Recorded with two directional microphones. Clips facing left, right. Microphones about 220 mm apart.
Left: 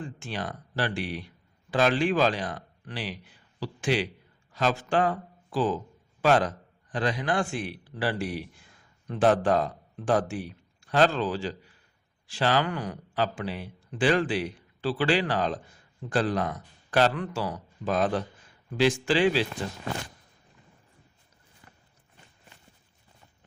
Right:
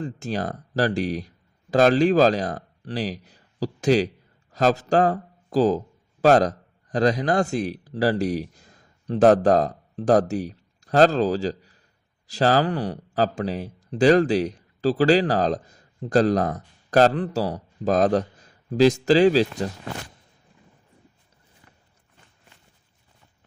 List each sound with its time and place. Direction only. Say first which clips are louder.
0.0 s a man's voice: right 7 dB; 40° right (ahead or behind)